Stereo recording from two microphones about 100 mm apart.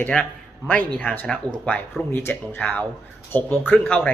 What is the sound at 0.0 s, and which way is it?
Speech, 15° left (ahead or behind).